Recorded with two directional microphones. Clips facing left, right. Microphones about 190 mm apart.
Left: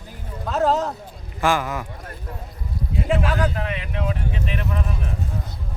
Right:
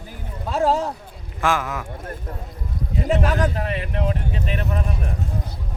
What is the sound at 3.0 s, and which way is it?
Speech, 40° right (ahead or behind).